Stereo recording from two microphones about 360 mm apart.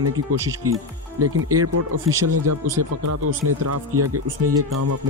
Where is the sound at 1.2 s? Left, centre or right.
Right.